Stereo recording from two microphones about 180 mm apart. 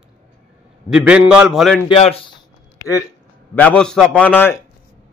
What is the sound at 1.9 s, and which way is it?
Speech, 35° left (ahead or behind).